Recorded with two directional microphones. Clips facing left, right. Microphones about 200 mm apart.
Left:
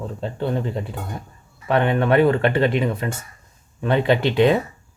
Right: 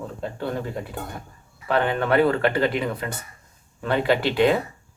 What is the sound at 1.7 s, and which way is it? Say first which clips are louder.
Speech: left 3 dB; 20° left (ahead or behind).